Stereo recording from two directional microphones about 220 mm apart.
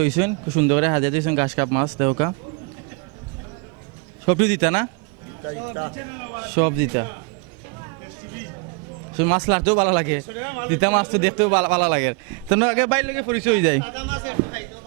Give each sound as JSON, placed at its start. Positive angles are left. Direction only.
{"t": 0.0, "sound": "a man's voice", "side_deg": -15}
{"t": 4.3, "sound": "a man's voice", "side_deg": -10}
{"t": 6.6, "sound": "a man's voice", "side_deg": -15}
{"t": 9.1, "sound": "a man's voice", "side_deg": -15}